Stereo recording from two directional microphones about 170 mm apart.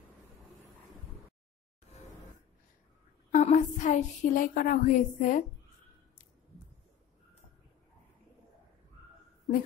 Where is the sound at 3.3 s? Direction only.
40° left (ahead or behind).